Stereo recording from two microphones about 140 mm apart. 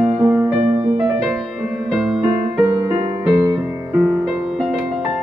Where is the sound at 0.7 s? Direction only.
50° right (ahead or behind).